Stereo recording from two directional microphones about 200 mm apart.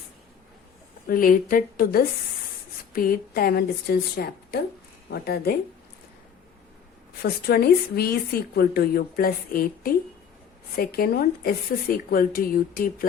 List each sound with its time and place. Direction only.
1.0 s a woman's voice: 45° left (ahead or behind)
7.2 s a woman's voice: 50° left (ahead or behind)